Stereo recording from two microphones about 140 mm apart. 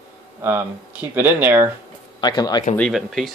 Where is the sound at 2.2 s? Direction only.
30° left (ahead or behind).